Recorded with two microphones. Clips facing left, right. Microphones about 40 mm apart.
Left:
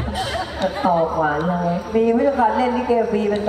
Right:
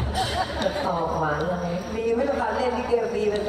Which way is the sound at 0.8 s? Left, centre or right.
Left.